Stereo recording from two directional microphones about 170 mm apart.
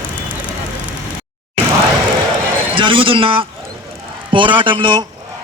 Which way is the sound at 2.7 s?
30° right (ahead or behind).